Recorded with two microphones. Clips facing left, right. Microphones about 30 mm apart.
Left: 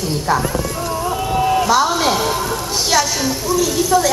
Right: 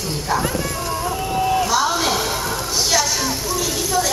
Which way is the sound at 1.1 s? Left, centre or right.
Centre.